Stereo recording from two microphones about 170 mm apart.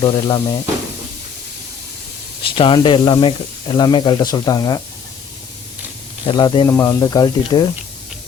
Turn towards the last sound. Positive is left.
turn(degrees=25)  # may be behind; listen again after turning